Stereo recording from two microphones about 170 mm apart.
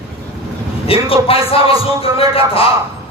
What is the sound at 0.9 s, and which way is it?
A man's voice, 35° left (ahead or behind).